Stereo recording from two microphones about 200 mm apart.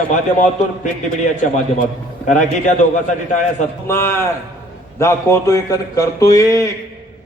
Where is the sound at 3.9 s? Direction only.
10° left (ahead or behind).